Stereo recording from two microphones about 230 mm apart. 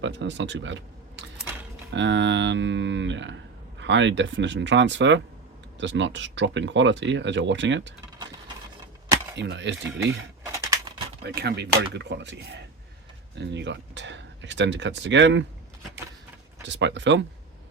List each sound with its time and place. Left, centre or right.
0.0 s speech: right
9.3 s speech: right
10.4 s a sound: centre
11.2 s speech: right
16.6 s speech: right